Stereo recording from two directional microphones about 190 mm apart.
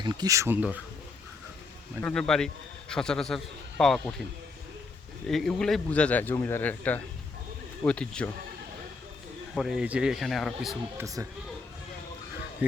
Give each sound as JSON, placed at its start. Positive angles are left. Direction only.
{"t": 0.0, "sound": "speech", "side_deg": -20}
{"t": 2.0, "sound": "a man's voice", "side_deg": 5}
{"t": 5.3, "sound": "a man's voice", "side_deg": 0}
{"t": 9.6, "sound": "a man's voice", "side_deg": -5}
{"t": 10.9, "sound": "speech", "side_deg": -15}